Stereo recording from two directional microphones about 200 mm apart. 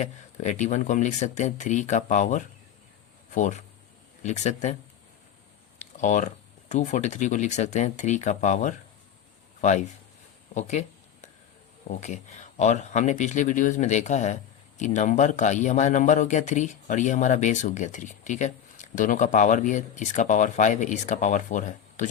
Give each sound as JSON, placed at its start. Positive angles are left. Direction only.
{"t": 0.0, "sound": "a man's voice", "side_deg": 35}
{"t": 6.0, "sound": "a man's voice", "side_deg": 40}
{"t": 10.5, "sound": "a sound", "side_deg": 35}
{"t": 11.9, "sound": "a man's voice", "side_deg": 35}